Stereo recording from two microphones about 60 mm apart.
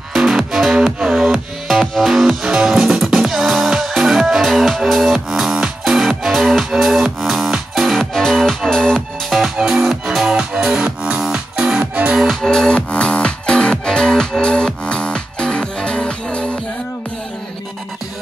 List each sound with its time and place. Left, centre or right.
0.1 s music: centre
1.7 s music: centre
9.6 s music: centre
12.2 s music: centre
12.4 s music: centre